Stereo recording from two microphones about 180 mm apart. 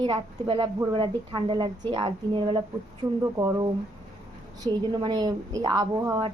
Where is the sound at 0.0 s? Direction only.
30° right (ahead or behind).